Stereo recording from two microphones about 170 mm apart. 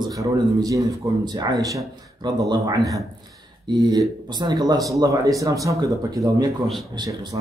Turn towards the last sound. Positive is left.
turn(degrees=-25)  # may be behind; listen again after turning